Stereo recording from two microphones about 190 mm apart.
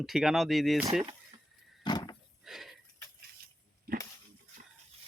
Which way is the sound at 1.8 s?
20° left (ahead or behind).